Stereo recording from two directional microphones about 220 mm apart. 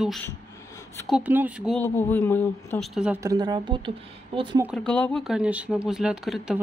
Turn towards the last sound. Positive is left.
turn(degrees=0)  # may be behind; listen again after turning